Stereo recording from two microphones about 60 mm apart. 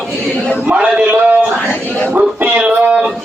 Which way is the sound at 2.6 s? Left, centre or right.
Right.